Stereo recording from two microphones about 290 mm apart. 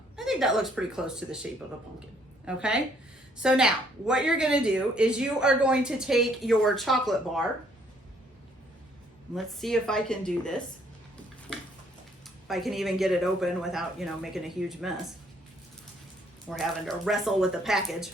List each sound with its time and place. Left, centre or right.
0.3 s a woman's voice: centre
9.3 s a woman's voice: centre
12.5 s a woman's voice: centre
16.5 s a woman's voice: centre